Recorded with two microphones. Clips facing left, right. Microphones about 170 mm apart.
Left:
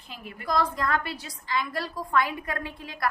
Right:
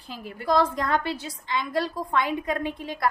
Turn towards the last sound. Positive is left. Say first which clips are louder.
# right 6 dB
turn(degrees=-25)  # may be behind; listen again after turning